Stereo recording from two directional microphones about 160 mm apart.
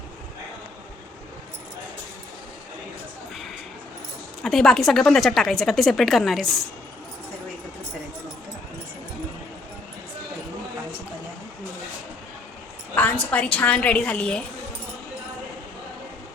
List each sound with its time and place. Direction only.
4.4 s speech: centre (ahead or behind)
12.9 s a woman's voice: 10° left (ahead or behind)